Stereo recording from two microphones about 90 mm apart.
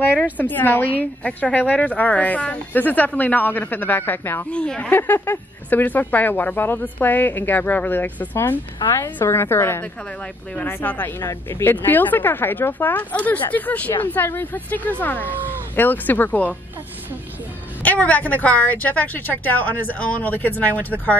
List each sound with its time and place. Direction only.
0.0 s a woman's voice: 20° left (ahead or behind)
4.5 s a woman's voice: 10° left (ahead or behind)
11.1 s speech: 35° left (ahead or behind)
11.7 s a woman's voice: 20° left (ahead or behind)
17.8 s a woman's voice: 15° left (ahead or behind)